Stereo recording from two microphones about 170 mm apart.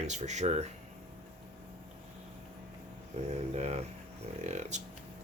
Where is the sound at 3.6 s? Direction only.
40° right (ahead or behind).